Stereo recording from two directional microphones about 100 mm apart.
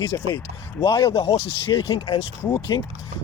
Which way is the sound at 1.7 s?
55° left (ahead or behind).